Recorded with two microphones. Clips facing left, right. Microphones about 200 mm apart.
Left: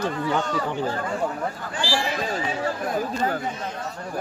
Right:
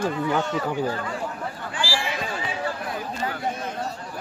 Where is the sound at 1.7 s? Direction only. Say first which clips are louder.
Left 2 dB; 40° left (ahead or behind).